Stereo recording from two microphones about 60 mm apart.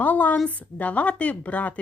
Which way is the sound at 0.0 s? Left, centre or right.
Left.